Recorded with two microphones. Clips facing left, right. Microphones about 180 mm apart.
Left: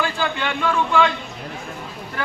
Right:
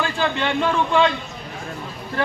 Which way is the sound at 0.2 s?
25° right (ahead or behind).